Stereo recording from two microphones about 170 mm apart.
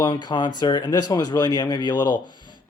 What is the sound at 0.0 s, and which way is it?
Speech, 25° left (ahead or behind).